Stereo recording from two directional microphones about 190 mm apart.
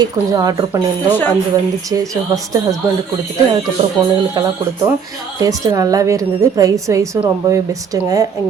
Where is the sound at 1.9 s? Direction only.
20° right (ahead or behind).